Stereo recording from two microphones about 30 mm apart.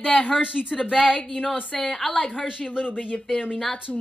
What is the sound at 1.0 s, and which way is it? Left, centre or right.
Speech, left.